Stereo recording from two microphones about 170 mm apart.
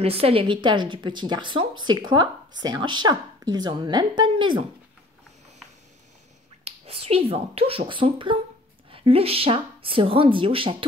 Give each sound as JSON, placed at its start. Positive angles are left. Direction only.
{"t": 0.0, "sound": "speech", "side_deg": -35}
{"t": 6.6, "sound": "speech", "side_deg": -35}